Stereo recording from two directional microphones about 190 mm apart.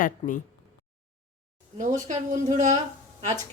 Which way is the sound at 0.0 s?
45° left (ahead or behind).